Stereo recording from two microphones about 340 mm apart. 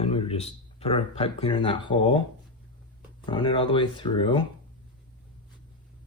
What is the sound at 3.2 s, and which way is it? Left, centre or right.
Speech, centre.